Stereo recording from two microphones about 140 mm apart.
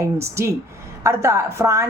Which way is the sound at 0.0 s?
20° right (ahead or behind).